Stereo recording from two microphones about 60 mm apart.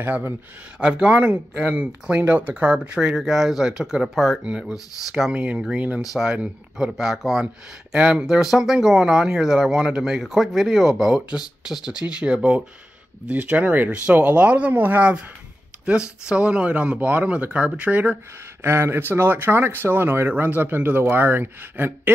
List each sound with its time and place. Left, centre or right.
0.7 s speech: centre
1.1 s speech: right
3.2 s speech: centre
4.4 s speech: centre
4.7 s speech: left
5.3 s speech: right
7.0 s speech: centre
7.9 s speech: centre
8.3 s speech: centre; by 14.7 s right
14.7 s speech: right
15.0 s speech: centre
18.6 s speech: right